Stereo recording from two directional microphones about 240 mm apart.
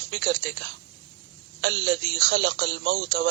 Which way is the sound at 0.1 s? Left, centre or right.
Right.